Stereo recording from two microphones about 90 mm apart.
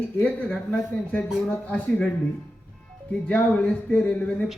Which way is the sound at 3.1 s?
15° left (ahead or behind).